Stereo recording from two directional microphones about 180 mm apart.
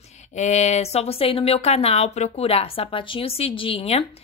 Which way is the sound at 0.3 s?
40° left (ahead or behind).